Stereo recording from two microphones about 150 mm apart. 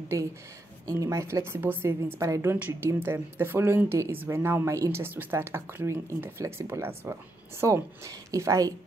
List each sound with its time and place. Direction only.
0.1 s a woman's voice: 20° right (ahead or behind)